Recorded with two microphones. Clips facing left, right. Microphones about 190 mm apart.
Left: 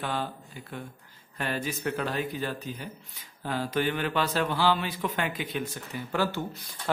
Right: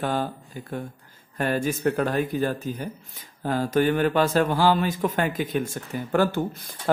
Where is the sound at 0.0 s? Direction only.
45° right (ahead or behind).